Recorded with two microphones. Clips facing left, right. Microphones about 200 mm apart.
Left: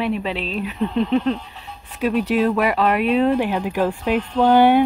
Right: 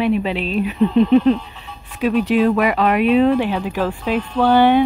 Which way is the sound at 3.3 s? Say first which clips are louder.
Right 1 dB; 10° left (ahead or behind).